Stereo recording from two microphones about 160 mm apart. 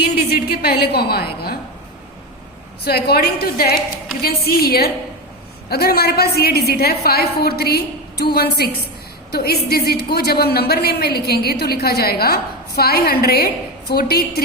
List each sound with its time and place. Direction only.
0.0 s a woman's voice: 75° left (ahead or behind)
2.8 s a woman's voice: 80° left